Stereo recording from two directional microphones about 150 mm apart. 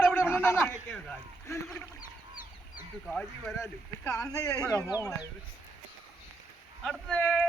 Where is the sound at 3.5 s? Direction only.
20° left (ahead or behind).